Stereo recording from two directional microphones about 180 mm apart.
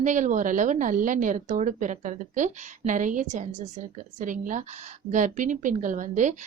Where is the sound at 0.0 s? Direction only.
45° right (ahead or behind).